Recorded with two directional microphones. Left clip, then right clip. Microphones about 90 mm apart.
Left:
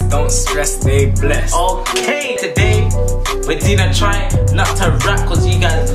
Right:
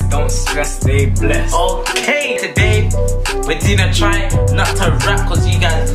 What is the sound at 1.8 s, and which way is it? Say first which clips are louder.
Speech: right 1 dB; centre (ahead or behind).